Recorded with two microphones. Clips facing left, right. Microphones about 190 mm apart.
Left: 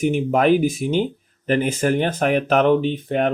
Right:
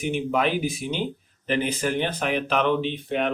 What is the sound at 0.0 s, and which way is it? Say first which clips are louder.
Speech: left 6 dB; 45° left (ahead or behind).